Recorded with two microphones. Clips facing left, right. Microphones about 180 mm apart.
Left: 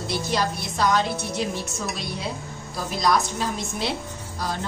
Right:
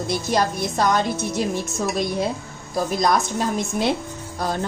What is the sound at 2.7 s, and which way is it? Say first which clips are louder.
Speech: right 3 dB; 50° right (ahead or behind).